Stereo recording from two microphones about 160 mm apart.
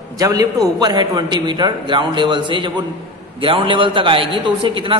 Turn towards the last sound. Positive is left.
turn(degrees=-30)  # may be behind; listen again after turning